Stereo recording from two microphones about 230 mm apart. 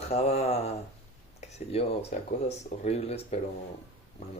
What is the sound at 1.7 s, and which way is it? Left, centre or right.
Speech, left.